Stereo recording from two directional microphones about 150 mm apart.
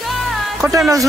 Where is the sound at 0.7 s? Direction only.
20° right (ahead or behind).